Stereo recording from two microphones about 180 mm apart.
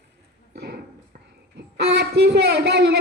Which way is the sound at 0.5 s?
65° right (ahead or behind).